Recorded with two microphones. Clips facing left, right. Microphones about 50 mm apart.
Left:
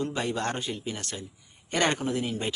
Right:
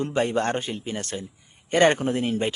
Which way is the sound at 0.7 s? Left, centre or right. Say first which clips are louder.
Right 4 dB; right.